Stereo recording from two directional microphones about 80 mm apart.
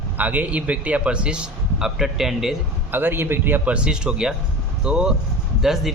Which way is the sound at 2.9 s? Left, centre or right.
Right.